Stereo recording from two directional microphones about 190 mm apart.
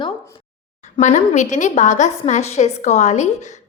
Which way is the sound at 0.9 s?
40° left (ahead or behind).